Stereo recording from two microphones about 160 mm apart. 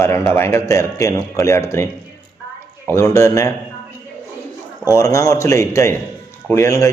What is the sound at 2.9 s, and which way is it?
Speech, 20° left (ahead or behind).